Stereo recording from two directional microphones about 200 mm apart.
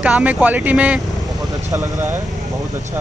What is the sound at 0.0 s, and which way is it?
Speech, 5° right (ahead or behind).